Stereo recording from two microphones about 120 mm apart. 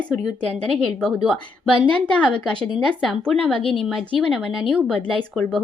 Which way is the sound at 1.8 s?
10° left (ahead or behind).